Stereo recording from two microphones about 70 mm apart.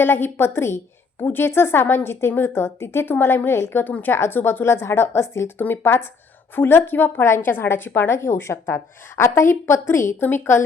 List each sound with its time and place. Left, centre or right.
0.0 s speech: left
5.5 s speech: left